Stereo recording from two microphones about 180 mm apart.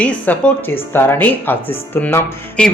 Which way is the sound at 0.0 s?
10° left (ahead or behind).